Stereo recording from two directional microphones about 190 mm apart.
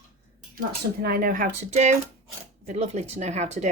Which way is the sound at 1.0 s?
50° right (ahead or behind).